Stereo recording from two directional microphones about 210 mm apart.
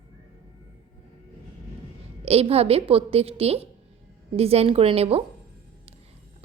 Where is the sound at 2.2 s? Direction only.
30° right (ahead or behind).